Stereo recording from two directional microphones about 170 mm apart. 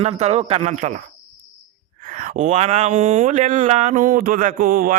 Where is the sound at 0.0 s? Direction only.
40° right (ahead or behind).